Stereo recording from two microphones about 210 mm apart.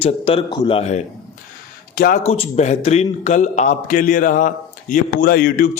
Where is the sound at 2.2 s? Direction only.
30° left (ahead or behind).